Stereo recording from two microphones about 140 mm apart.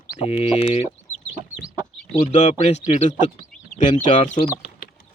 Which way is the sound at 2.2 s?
55° left (ahead or behind).